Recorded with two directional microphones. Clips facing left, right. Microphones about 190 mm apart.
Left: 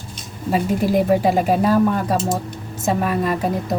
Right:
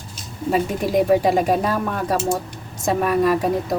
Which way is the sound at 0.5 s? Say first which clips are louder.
Left 1 dB; centre (ahead or behind).